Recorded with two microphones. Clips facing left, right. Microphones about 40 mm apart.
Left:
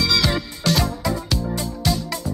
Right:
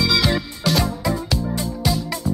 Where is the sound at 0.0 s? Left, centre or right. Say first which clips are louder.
Right 1 dB; centre.